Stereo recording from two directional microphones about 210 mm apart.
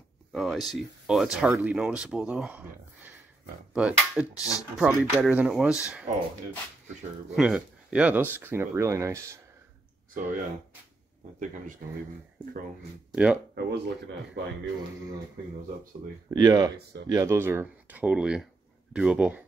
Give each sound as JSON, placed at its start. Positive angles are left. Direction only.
{"t": 0.3, "sound": "a sound", "side_deg": 0}
{"t": 0.7, "sound": "speech", "side_deg": 0}
{"t": 3.7, "sound": "speech", "side_deg": -5}
{"t": 7.3, "sound": "speech", "side_deg": -5}
{"t": 11.3, "sound": "speech", "side_deg": -35}
{"t": 13.1, "sound": "speech", "side_deg": -5}
{"t": 13.6, "sound": "a man's voice", "side_deg": -55}
{"t": 16.3, "sound": "speech", "side_deg": -20}